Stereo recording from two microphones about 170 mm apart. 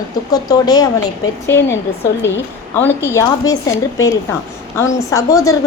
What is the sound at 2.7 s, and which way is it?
A woman's voice, 15° left (ahead or behind).